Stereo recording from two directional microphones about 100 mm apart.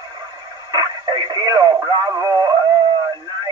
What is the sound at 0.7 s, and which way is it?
Radio, 45° right (ahead or behind).